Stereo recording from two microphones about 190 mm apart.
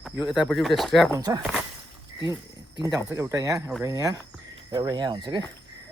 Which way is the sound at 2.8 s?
15° right (ahead or behind).